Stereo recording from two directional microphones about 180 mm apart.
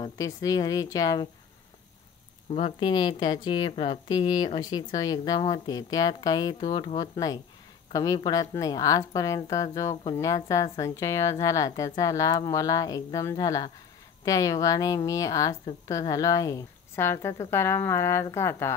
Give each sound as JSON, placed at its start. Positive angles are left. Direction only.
{"t": 0.0, "sound": "a woman's voice", "side_deg": 20}
{"t": 2.5, "sound": "a woman's voice", "side_deg": 30}